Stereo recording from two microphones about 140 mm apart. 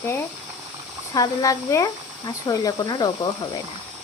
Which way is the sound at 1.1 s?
25° left (ahead or behind).